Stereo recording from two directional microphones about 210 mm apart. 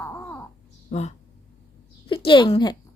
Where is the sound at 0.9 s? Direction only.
35° left (ahead or behind).